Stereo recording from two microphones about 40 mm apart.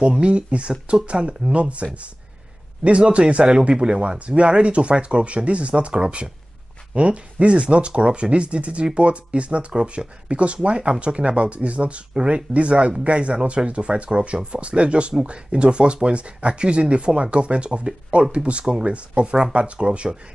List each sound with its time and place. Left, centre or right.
0.0 s speech: right